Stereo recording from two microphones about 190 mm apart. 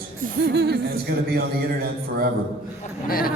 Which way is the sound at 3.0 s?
50° left (ahead or behind).